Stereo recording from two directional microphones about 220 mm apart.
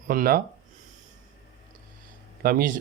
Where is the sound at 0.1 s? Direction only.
40° right (ahead or behind).